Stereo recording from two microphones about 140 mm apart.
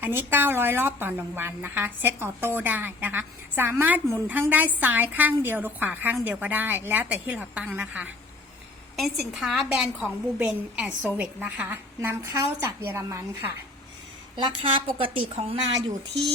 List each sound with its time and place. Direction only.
0.0 s a woman's voice: 15° right (ahead or behind)
9.0 s a woman's voice: centre (ahead or behind)
11.9 s a woman's voice: 20° right (ahead or behind)
14.3 s a woman's voice: 35° right (ahead or behind)